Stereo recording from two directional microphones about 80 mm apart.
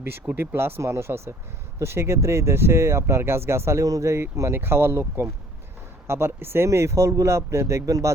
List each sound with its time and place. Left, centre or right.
0.0 s speech: right